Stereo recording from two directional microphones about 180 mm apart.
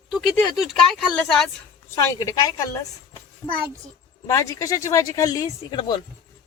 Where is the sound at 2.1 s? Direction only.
20° left (ahead or behind).